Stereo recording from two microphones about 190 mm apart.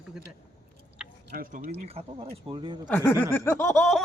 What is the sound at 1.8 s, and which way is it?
Speech, 30° right (ahead or behind).